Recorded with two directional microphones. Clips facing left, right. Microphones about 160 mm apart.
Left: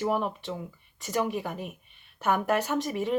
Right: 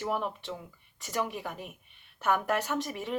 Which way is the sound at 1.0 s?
15° left (ahead or behind).